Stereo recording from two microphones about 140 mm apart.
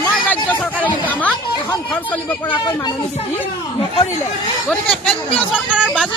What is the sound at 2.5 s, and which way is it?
Speech, 35° left (ahead or behind).